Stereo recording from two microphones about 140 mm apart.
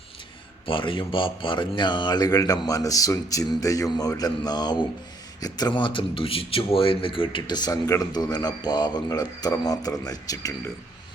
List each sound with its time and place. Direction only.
0.6 s speech: 35° left (ahead or behind)